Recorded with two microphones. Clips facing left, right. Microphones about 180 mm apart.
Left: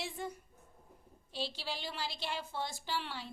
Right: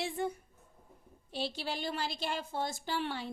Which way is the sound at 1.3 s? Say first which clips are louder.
Right 4 dB; 55° right (ahead or behind).